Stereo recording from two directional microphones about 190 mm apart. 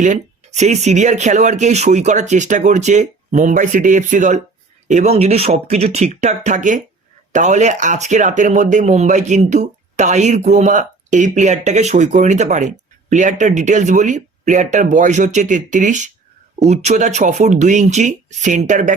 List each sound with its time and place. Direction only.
0.0 s speech: 40° right (ahead or behind)